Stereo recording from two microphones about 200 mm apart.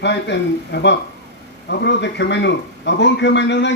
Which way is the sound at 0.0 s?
60° left (ahead or behind).